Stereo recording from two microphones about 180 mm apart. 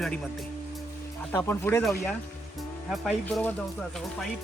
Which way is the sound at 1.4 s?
10° left (ahead or behind).